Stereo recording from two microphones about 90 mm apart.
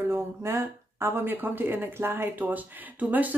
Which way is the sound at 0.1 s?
30° right (ahead or behind).